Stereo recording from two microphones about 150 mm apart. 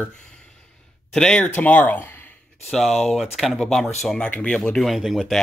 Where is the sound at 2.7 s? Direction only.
Centre (ahead or behind).